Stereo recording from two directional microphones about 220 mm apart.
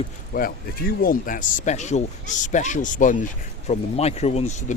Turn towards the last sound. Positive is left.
turn(degrees=30)  # may be behind; listen again after turning